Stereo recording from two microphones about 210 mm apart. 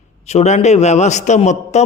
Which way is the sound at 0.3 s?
30° left (ahead or behind).